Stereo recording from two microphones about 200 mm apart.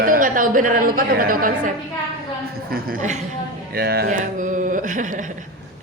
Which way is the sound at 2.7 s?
45° right (ahead or behind).